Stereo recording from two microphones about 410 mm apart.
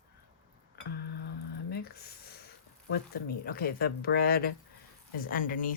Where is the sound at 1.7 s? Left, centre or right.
Left.